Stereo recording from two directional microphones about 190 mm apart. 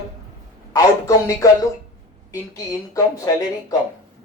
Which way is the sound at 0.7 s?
15° left (ahead or behind).